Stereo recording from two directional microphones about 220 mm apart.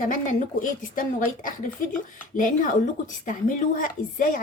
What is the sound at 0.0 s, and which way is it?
A woman's voice, 35° left (ahead or behind).